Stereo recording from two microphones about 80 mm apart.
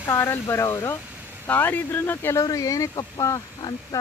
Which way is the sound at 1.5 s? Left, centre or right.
Left.